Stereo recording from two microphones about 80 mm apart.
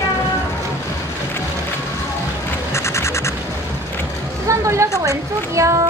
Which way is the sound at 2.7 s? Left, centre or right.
Left.